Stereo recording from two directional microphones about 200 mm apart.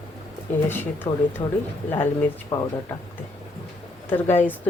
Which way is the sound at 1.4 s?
25° left (ahead or behind).